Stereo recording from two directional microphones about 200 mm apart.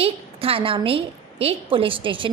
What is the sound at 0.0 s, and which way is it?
A woman's voice, 30° right (ahead or behind).